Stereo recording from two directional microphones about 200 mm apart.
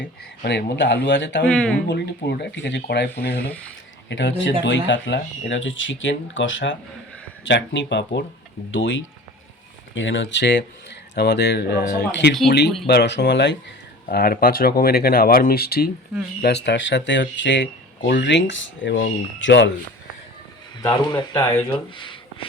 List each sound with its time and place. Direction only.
0.4 s speech: 60° left (ahead or behind)
1.5 s speech: 5° left (ahead or behind)
1.9 s speech: 60° left (ahead or behind)
14.1 s speech: 50° left (ahead or behind); by 19.7 s 65° left (ahead or behind)
20.8 s a man's voice: 25° left (ahead or behind)
21.9 s a sound: 25° left (ahead or behind)